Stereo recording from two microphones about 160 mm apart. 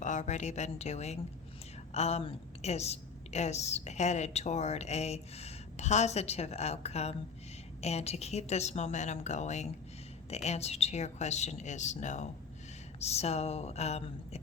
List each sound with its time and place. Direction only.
0.0 s a woman's voice: 50° left (ahead or behind)